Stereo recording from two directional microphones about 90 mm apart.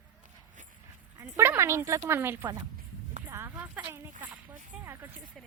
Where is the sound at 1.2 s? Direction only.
25° right (ahead or behind).